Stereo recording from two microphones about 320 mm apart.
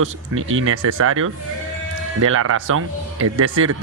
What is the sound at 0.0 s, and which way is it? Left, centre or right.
A man's voice, right.